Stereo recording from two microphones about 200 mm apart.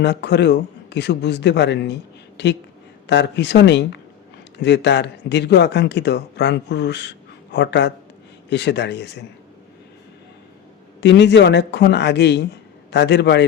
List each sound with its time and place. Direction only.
0.0 s speech: 60° left (ahead or behind)
11.0 s speech: 60° left (ahead or behind)